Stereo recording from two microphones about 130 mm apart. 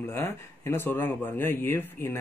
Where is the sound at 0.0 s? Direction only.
20° left (ahead or behind).